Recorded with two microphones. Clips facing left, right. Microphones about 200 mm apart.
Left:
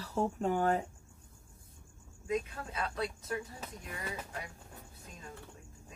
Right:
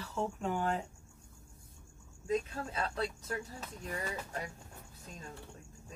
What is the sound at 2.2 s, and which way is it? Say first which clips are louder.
Speech: right 1 dB; 30° right (ahead or behind).